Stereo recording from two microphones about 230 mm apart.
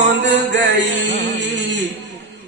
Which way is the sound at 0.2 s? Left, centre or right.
Right.